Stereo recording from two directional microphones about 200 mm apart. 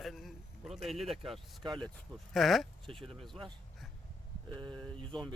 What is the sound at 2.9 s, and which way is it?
Speech, 25° right (ahead or behind).